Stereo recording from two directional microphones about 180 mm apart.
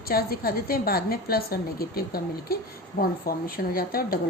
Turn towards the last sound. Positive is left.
turn(degrees=55)  # may be behind; listen again after turning